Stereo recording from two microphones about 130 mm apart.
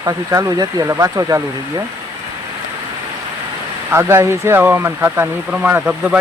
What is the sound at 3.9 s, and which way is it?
Speech, 20° right (ahead or behind).